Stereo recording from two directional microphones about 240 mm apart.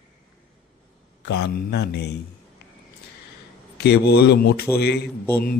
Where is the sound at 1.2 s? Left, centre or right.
Left.